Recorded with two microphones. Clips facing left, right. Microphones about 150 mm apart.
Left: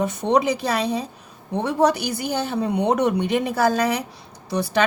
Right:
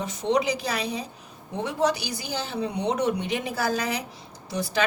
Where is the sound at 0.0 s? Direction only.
55° left (ahead or behind).